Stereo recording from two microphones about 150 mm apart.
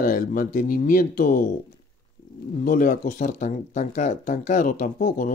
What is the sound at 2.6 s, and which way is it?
Speech, 65° left (ahead or behind).